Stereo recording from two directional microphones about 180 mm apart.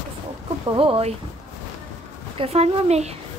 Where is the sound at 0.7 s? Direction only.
30° right (ahead or behind).